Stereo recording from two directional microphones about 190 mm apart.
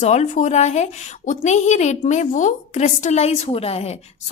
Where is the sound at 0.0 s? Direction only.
35° left (ahead or behind).